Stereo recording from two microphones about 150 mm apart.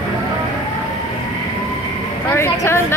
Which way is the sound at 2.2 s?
15° left (ahead or behind).